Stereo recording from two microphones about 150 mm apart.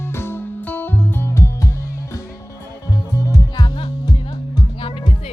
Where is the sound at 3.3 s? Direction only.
25° left (ahead or behind).